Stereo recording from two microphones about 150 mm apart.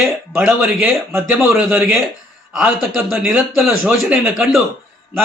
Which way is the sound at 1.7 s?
15° right (ahead or behind).